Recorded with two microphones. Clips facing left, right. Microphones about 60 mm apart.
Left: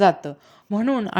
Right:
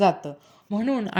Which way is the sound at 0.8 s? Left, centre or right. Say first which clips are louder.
Left 3 dB; left.